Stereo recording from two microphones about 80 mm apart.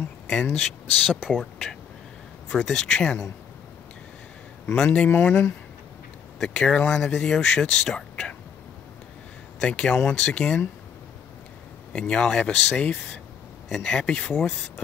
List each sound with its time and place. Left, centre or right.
0.3 s speech: centre
1.2 s speech: centre
2.5 s speech: centre
4.9 s speech: centre
9.6 s speech: centre
11.9 s speech: centre